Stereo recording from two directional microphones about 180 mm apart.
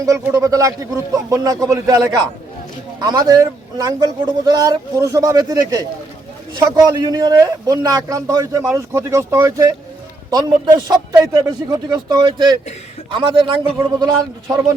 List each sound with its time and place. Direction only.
0.0 s a man's voice: 15° right (ahead or behind)
11.3 s a man's voice: 20° right (ahead or behind)